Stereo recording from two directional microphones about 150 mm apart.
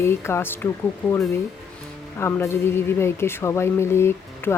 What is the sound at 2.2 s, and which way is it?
Speech, 15° left (ahead or behind).